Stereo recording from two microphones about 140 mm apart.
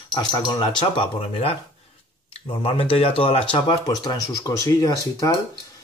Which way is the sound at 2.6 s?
40° left (ahead or behind).